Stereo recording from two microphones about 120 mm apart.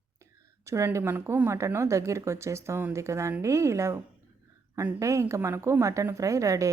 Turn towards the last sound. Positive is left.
turn(degrees=-25)  # may be behind; listen again after turning